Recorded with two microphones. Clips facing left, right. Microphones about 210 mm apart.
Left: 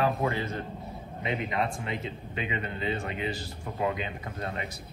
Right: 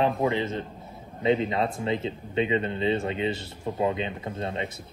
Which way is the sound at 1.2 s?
30° right (ahead or behind).